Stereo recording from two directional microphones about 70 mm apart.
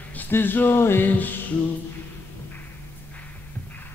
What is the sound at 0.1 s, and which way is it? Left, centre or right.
Music, left.